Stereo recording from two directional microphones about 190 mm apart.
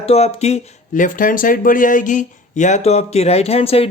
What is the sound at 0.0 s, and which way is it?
Speech, 30° left (ahead or behind).